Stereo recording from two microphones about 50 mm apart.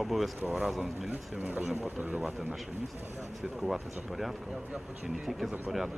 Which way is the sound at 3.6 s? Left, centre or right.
Centre.